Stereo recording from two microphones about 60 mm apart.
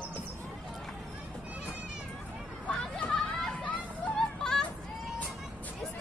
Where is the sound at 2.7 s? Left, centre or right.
Centre.